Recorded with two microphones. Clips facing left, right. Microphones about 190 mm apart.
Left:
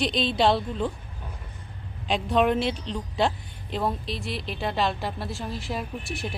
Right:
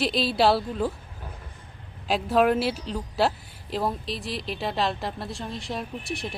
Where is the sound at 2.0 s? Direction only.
5° right (ahead or behind).